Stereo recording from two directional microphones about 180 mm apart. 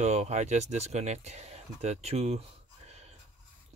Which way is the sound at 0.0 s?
40° right (ahead or behind).